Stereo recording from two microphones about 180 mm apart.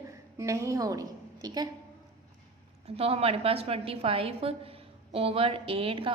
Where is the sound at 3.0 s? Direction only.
35° right (ahead or behind).